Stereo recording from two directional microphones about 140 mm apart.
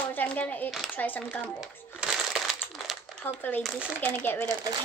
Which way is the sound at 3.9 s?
15° left (ahead or behind).